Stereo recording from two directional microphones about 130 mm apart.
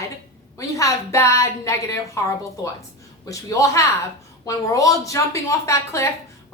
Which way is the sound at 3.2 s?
25° left (ahead or behind).